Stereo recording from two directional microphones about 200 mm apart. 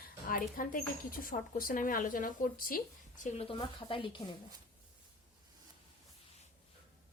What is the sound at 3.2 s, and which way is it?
A woman's voice, 30° left (ahead or behind).